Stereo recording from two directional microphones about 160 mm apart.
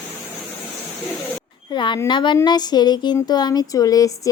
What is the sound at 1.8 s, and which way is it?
Speech, 30° left (ahead or behind).